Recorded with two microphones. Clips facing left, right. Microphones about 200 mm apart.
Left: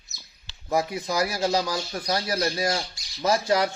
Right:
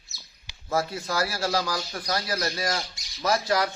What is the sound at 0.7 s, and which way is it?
Speech, 15° left (ahead or behind).